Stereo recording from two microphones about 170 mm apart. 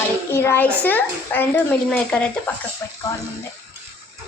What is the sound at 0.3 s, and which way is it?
Speech, 15° left (ahead or behind).